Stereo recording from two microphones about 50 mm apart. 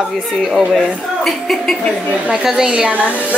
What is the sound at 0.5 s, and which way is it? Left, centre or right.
A woman's voice, centre.